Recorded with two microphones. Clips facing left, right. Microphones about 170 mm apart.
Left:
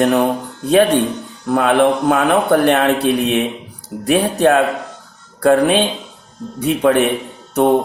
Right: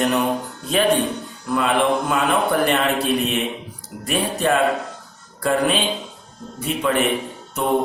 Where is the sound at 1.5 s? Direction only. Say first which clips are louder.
Left 6 dB; 60° left (ahead or behind).